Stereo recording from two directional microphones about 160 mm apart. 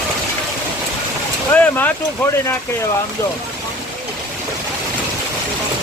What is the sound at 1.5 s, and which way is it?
Boat, 10° left (ahead or behind).